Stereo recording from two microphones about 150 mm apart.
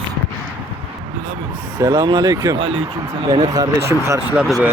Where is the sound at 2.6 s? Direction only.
40° right (ahead or behind).